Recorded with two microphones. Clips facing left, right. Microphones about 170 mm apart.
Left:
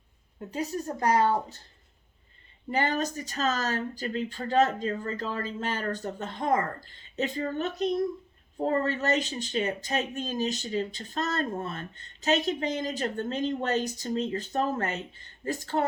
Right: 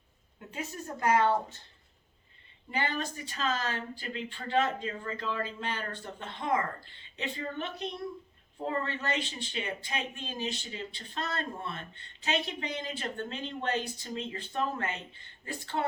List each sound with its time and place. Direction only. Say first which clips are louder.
0.3 s speech: left 8 dB; 35° left (ahead or behind)
2.6 s speech: left 6 dB; 45° left (ahead or behind)